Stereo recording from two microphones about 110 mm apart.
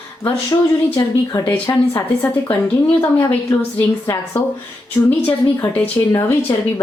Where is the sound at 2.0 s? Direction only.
20° left (ahead or behind).